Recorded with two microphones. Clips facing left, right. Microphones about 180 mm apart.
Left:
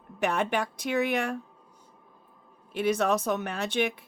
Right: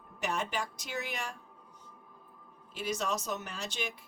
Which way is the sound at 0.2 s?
60° left (ahead or behind).